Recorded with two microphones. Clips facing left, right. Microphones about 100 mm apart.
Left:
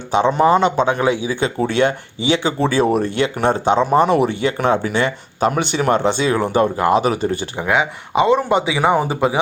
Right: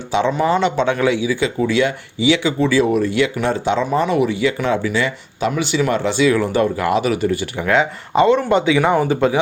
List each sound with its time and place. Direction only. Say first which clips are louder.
0.3 s speech: left 4 dB; 30° left (ahead or behind)
1.6 s speech: left 1 dB; 50° left (ahead or behind); by 7.3 s 35° left (ahead or behind)
7.7 s speech: right 2 dB; 15° left (ahead or behind)